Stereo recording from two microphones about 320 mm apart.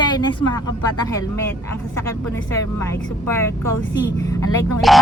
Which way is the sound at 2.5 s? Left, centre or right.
Centre.